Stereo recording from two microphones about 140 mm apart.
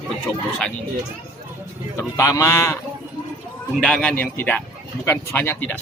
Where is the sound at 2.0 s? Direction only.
20° left (ahead or behind).